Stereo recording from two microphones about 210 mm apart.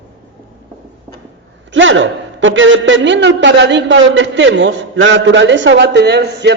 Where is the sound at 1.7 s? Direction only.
65° right (ahead or behind).